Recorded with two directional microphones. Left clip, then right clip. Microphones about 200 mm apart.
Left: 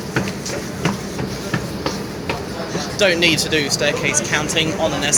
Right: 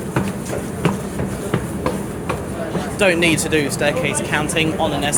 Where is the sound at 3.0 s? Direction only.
25° right (ahead or behind).